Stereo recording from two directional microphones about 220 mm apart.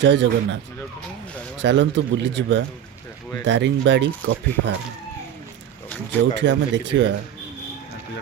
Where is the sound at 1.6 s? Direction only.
55° right (ahead or behind).